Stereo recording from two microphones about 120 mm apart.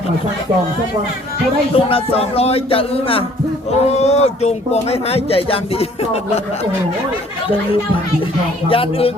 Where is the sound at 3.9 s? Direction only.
65° left (ahead or behind).